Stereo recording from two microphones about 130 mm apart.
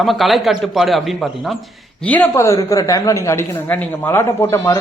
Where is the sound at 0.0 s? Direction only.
Centre (ahead or behind).